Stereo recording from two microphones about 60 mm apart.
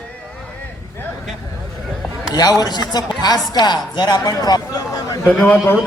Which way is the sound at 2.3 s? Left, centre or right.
Left.